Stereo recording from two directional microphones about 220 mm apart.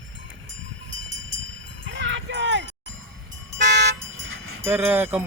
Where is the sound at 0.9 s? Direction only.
60° right (ahead or behind).